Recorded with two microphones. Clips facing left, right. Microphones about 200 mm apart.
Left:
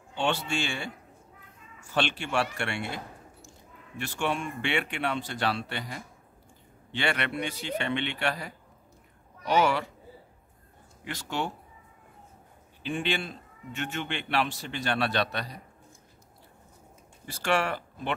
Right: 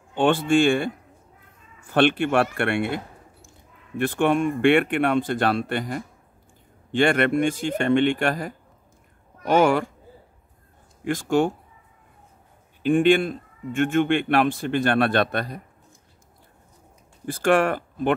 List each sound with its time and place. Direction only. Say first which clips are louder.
0.1 s speech: right 10 dB; 50° right (ahead or behind)
11.1 s speech: right 12 dB; 50° right (ahead or behind)
12.8 s speech: right 13 dB; 50° right (ahead or behind)
17.3 s speech: right 8 dB; 50° right (ahead or behind)